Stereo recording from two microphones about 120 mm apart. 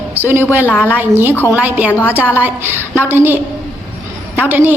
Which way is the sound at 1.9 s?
20° left (ahead or behind).